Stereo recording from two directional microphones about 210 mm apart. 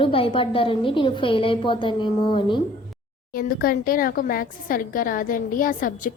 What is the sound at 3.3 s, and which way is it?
A woman's voice, 45° left (ahead or behind).